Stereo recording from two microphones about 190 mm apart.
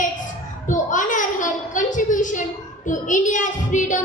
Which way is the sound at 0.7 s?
45° left (ahead or behind).